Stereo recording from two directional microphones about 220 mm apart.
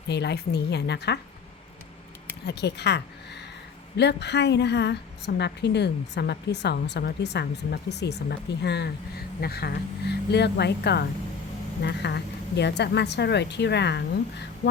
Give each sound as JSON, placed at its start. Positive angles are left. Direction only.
{"t": 0.1, "sound": "a woman's voice", "side_deg": 50}
{"t": 2.5, "sound": "a woman's voice", "side_deg": 50}